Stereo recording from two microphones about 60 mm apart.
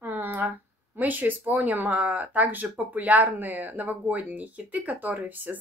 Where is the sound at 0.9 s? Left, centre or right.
Right.